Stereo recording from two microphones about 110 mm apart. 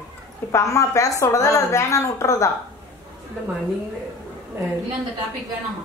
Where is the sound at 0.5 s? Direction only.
30° left (ahead or behind).